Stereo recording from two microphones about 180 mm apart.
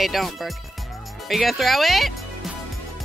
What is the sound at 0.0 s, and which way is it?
Speech, centre (ahead or behind).